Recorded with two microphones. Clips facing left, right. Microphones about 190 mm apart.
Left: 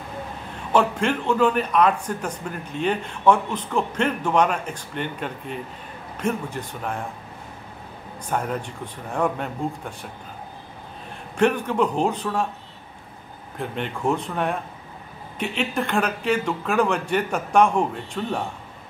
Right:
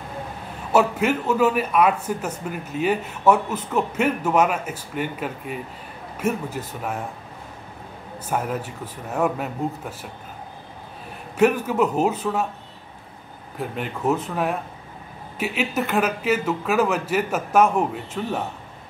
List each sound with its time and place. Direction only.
0.7 s a man's voice: 5° right (ahead or behind)
8.3 s speech: 5° right (ahead or behind)
11.3 s speech: 5° right (ahead or behind)
13.6 s speech: 5° right (ahead or behind)